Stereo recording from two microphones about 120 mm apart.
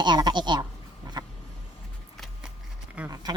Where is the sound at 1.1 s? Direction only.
35° right (ahead or behind).